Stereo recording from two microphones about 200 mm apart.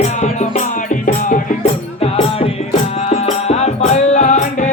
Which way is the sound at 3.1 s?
35° left (ahead or behind).